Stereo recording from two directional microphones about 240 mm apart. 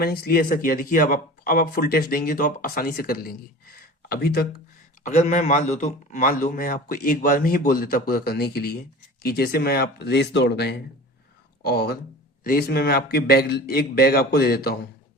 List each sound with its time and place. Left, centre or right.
0.0 s speech: left
5.0 s speech: left